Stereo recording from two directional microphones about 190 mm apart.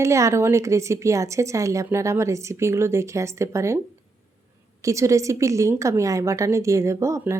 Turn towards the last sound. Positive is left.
turn(degrees=-15)  # may be behind; listen again after turning